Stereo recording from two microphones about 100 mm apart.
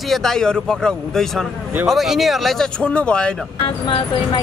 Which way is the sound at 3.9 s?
65° left (ahead or behind).